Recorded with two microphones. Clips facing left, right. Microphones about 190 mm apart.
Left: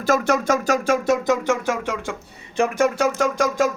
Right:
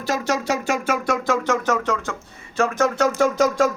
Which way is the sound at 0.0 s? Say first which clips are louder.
Left 4 dB; 50° left (ahead or behind).